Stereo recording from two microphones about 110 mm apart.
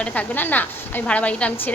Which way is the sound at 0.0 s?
15° left (ahead or behind).